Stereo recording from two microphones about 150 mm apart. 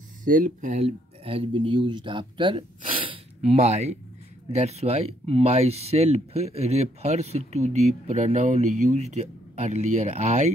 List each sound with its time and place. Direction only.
0.2 s speech: 60° right (ahead or behind); by 3.2 s 35° right (ahead or behind)
3.3 s speech: 45° right (ahead or behind)